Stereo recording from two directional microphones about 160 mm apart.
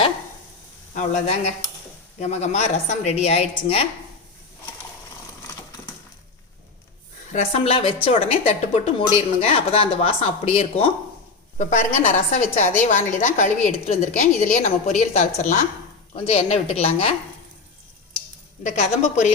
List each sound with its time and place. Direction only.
0.9 s a woman's voice: 45° left (ahead or behind)
7.3 s a woman's voice: 45° left (ahead or behind)
18.6 s a woman's voice: 45° left (ahead or behind)